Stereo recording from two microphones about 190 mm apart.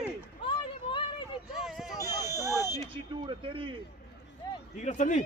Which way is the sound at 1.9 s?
20° left (ahead or behind).